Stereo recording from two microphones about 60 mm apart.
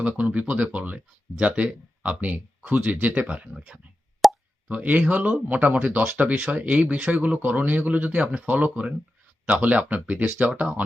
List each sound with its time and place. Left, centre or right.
0.0 s speech: right
3.3 s speech: centre
4.2 s plop: centre
4.7 s speech: right